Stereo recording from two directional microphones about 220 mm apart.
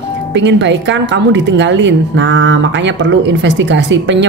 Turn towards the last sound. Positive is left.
turn(degrees=-55)  # may be behind; listen again after turning